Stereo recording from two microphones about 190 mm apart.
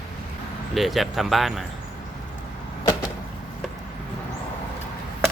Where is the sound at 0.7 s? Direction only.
Centre (ahead or behind).